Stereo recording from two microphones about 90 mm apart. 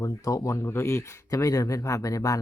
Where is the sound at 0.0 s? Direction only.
40° left (ahead or behind).